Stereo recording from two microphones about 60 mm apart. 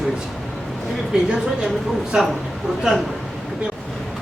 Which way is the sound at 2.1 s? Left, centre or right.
Centre.